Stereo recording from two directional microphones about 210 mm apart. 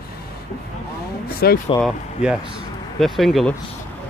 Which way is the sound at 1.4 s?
50° left (ahead or behind).